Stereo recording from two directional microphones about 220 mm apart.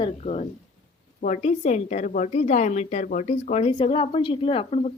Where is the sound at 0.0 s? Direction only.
30° left (ahead or behind).